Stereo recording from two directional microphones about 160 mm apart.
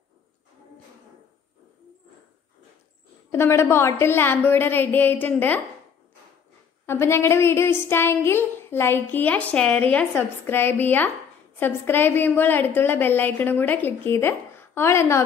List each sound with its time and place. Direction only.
3.3 s speech: 15° left (ahead or behind)
6.9 s speech: 15° left (ahead or behind)